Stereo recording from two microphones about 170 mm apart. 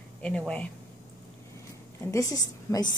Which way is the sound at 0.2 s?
5° left (ahead or behind).